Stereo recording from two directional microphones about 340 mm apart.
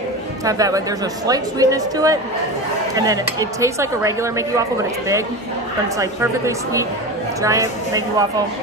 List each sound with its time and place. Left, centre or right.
0.5 s speech: centre
5.9 s speech: centre